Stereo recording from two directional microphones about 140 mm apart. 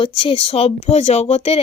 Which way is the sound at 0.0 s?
40° left (ahead or behind).